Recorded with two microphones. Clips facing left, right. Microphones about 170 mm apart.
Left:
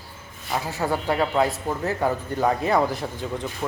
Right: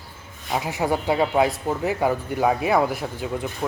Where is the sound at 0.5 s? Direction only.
15° right (ahead or behind).